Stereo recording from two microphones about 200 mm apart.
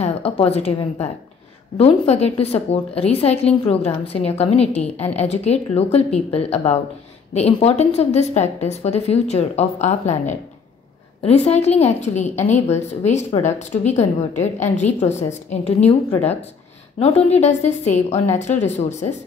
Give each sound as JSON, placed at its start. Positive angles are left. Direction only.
{"t": 0.0, "sound": "a woman's voice", "side_deg": 30}
{"t": 17.0, "sound": "a woman's voice", "side_deg": 35}